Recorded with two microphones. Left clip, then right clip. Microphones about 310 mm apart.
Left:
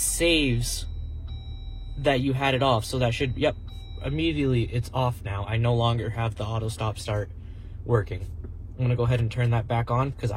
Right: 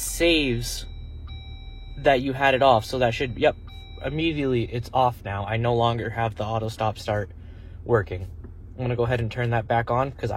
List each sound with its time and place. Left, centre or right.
0.0 s speech: right
2.0 s speech: right